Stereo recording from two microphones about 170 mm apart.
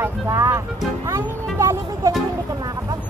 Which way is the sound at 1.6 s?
20° right (ahead or behind).